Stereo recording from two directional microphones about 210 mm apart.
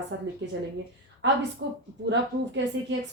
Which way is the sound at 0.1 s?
55° right (ahead or behind).